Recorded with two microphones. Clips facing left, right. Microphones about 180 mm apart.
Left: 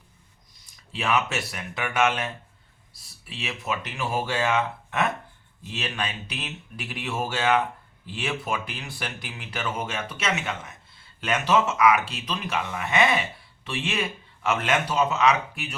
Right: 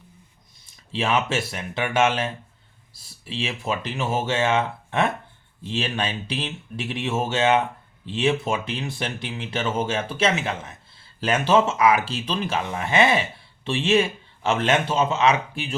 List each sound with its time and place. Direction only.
0.6 s speech: 25° right (ahead or behind)